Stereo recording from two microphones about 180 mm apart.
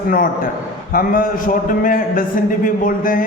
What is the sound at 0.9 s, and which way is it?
A man's voice, 50° left (ahead or behind).